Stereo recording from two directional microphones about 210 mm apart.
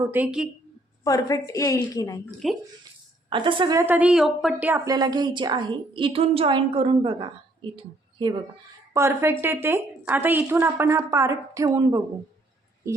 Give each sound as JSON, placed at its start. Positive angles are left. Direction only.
{"t": 0.0, "sound": "a woman's voice", "side_deg": -10}
{"t": 1.0, "sound": "a woman's voice", "side_deg": 15}
{"t": 2.4, "sound": "a woman's voice", "side_deg": 0}
{"t": 3.2, "sound": "a woman's voice", "side_deg": -25}
{"t": 8.9, "sound": "a woman's voice", "side_deg": -10}